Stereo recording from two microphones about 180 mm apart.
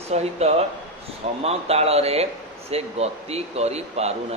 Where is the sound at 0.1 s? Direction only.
35° right (ahead or behind).